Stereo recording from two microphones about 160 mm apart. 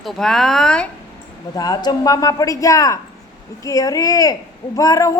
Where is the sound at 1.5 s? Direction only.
25° left (ahead or behind).